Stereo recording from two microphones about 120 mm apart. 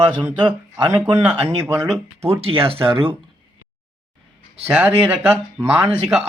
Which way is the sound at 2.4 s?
50° right (ahead or behind).